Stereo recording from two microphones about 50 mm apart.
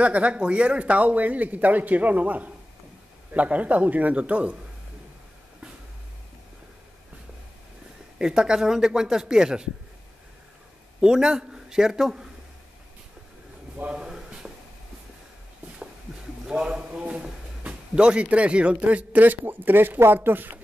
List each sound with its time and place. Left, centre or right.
0.0 s speech: right
8.2 s speech: centre
11.0 s a man's voice: centre
13.9 s a sound: centre
16.4 s a man's voice: centre; by 20.5 s right